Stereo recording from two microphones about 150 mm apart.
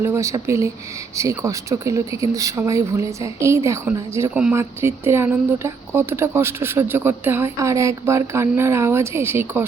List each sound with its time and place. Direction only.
0.0 s speech: 20° right (ahead or behind)